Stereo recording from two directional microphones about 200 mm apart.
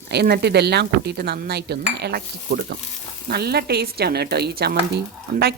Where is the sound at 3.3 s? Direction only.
50° right (ahead or behind).